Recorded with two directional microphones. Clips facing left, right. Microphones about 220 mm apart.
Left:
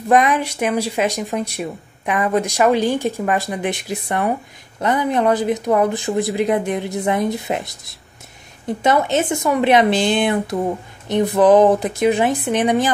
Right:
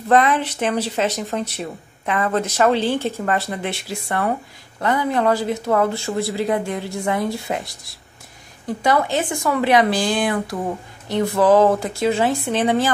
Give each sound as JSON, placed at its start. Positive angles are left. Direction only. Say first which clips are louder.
{"t": 0.1, "sound": "a woman's voice", "louder": "left 1 dB", "side_deg": 15}